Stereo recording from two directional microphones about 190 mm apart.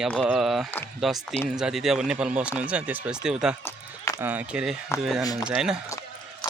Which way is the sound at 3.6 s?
15° left (ahead or behind).